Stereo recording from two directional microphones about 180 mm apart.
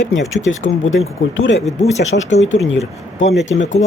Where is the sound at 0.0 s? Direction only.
90° left.